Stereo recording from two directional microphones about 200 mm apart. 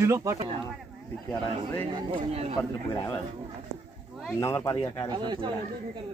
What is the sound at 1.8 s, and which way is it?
Speech, 25° right (ahead or behind).